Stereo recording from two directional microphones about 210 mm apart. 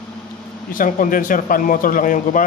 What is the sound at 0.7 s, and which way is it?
Speech, 40° left (ahead or behind).